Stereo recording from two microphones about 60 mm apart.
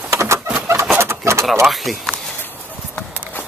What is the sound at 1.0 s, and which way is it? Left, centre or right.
Bird, right.